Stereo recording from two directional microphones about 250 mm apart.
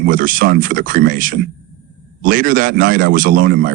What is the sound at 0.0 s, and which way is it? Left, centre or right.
Speech, right.